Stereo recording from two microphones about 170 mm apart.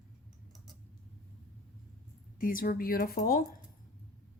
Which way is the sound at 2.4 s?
55° left (ahead or behind).